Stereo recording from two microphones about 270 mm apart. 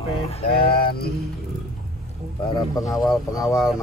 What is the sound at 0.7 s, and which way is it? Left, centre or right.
Mantra, left.